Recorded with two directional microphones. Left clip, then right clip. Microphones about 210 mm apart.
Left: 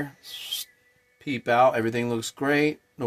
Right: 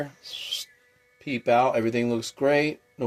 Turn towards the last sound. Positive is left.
turn(degrees=35)  # may be behind; listen again after turning